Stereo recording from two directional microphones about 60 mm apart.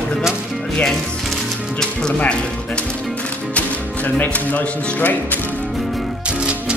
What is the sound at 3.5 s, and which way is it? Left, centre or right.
Speech, left.